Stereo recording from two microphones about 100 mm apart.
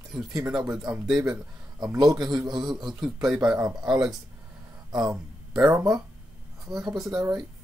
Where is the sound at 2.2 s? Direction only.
45° right (ahead or behind).